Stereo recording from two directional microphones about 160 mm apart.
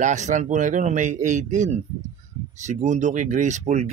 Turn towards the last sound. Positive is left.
turn(degrees=-45)  # may be behind; listen again after turning